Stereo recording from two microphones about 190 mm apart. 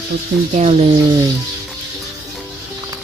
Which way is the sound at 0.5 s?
35° right (ahead or behind).